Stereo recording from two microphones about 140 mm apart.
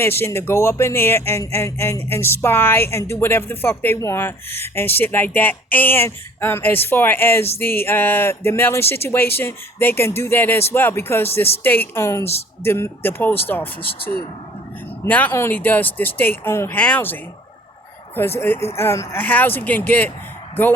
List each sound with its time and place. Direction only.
0.0 s speech: 15° left (ahead or behind)
15.0 s speech: 15° left (ahead or behind)
18.2 s speech: 15° left (ahead or behind)